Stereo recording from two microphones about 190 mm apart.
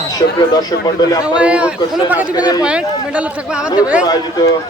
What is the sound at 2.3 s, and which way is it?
Speech, 20° left (ahead or behind).